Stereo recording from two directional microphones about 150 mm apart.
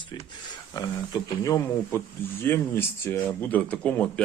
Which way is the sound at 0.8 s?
25° left (ahead or behind).